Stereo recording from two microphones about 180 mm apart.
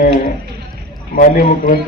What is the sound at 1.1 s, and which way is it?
Speech, 50° left (ahead or behind).